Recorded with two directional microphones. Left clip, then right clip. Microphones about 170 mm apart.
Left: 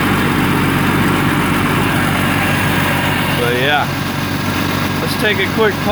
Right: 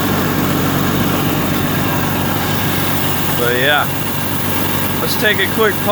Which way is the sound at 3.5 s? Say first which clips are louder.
Right 2 dB; centre (ahead or behind).